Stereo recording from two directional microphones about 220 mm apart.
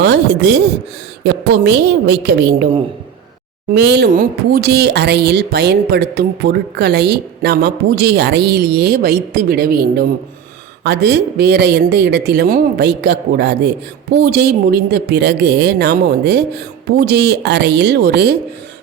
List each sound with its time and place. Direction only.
0.0 s speech: 50° right (ahead or behind)
3.7 s speech: 50° right (ahead or behind)